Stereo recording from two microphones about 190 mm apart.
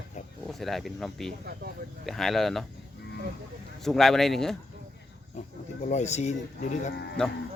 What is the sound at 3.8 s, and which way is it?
Speech, centre (ahead or behind).